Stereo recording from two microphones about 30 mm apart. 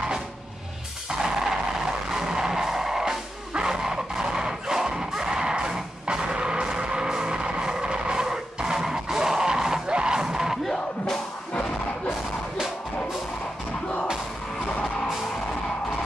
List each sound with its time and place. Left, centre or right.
1.1 s music: centre